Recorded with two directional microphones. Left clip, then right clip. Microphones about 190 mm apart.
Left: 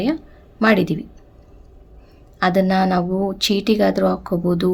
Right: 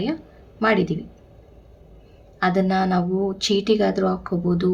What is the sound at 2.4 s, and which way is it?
Speech, 50° left (ahead or behind).